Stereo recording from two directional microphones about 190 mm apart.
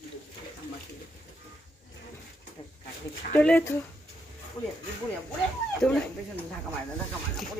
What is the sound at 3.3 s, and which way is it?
Speech, 10° left (ahead or behind).